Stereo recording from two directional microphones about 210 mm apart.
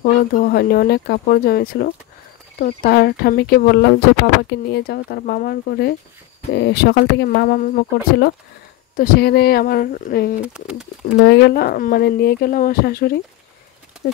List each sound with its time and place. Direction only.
0.0 s speech: 45° left (ahead or behind)
10.4 s speech: 5° right (ahead or behind)
11.1 s speech: 55° left (ahead or behind)